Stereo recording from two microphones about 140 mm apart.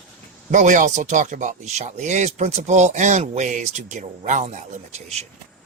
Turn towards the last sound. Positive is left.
turn(degrees=-50)  # may be behind; listen again after turning